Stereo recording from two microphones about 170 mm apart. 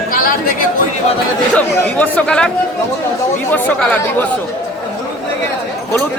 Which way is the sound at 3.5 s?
5° left (ahead or behind).